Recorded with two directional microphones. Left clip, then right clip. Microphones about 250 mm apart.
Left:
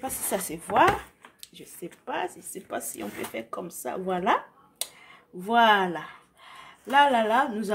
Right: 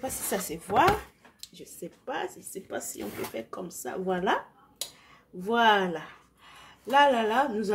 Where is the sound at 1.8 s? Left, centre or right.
Left.